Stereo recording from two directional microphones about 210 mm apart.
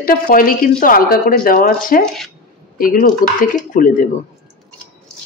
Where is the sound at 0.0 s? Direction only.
40° left (ahead or behind).